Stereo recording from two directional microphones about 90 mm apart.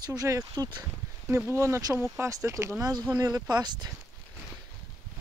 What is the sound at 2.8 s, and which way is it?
Speech, 45° right (ahead or behind).